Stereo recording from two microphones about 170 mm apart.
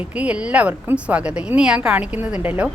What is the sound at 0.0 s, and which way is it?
A woman's voice, 10° right (ahead or behind).